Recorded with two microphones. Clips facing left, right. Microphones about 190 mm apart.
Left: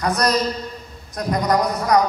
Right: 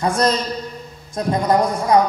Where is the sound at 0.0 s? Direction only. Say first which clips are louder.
Right 1 dB; 25° right (ahead or behind).